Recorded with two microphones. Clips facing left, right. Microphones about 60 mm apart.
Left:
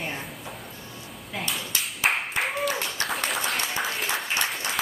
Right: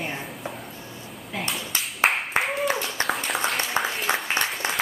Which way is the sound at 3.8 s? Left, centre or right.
Right.